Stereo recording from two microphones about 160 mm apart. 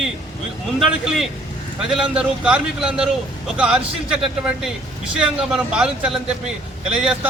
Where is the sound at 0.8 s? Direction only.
Centre (ahead or behind).